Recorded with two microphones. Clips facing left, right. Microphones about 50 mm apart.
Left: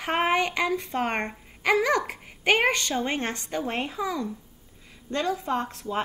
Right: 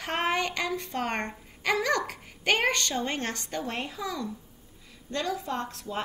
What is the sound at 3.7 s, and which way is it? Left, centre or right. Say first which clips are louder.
A woman's voice: left 5 dB; left.